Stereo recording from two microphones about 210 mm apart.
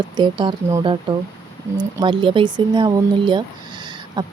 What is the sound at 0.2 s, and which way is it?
Speech, 20° right (ahead or behind).